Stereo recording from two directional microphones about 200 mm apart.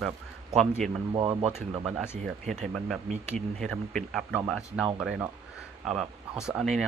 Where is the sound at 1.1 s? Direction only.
25° right (ahead or behind).